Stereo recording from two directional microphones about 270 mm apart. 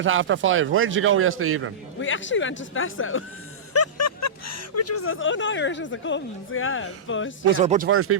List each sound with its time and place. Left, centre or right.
0.0 s a man's voice: right
2.0 s speech: left
3.7 s speech: left
7.6 s speech: right
7.9 s a man's voice: right